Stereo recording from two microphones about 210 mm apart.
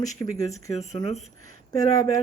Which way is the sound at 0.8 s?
30° left (ahead or behind).